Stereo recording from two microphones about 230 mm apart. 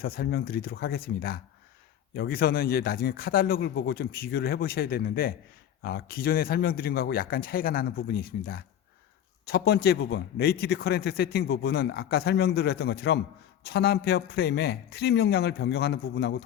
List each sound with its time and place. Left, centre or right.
0.0 s speech: left